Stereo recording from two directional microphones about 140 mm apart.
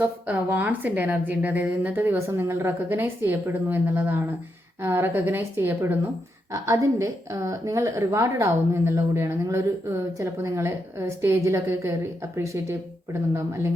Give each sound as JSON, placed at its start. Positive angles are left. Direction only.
{"t": 0.0, "sound": "a woman's voice", "side_deg": -15}